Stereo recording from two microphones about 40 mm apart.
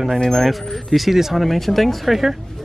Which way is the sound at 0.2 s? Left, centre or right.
Centre.